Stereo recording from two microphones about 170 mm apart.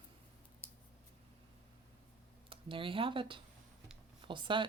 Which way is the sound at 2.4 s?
30° right (ahead or behind).